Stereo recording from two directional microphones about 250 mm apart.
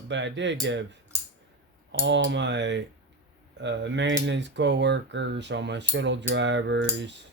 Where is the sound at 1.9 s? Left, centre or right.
Right.